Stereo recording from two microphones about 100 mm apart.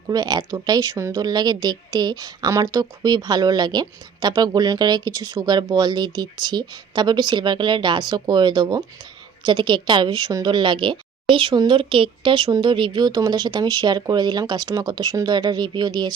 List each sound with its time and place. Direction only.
0.1 s speech: 45° right (ahead or behind)
1.2 s a woman's voice: 45° right (ahead or behind)